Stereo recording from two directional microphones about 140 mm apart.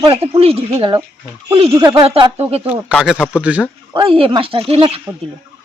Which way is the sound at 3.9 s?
40° right (ahead or behind).